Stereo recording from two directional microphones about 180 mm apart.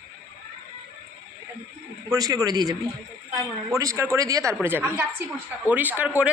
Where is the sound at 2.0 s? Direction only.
20° right (ahead or behind).